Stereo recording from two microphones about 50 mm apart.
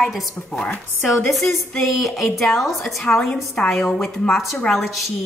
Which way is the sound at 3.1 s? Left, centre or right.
Left.